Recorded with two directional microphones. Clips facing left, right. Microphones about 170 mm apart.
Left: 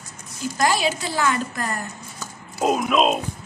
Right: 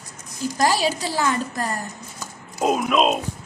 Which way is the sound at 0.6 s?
35° right (ahead or behind).